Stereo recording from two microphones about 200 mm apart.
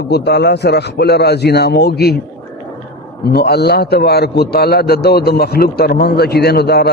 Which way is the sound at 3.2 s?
55° left (ahead or behind).